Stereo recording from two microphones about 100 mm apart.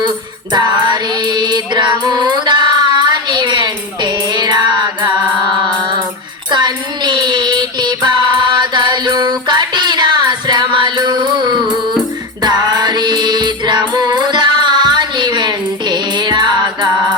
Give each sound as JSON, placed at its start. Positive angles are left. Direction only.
{"t": 0.5, "sound": "music", "side_deg": -50}
{"t": 6.5, "sound": "child singing", "side_deg": -45}
{"t": 9.5, "sound": "music", "side_deg": -45}